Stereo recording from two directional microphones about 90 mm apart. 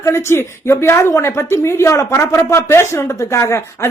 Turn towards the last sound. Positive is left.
turn(degrees=30)  # may be behind; listen again after turning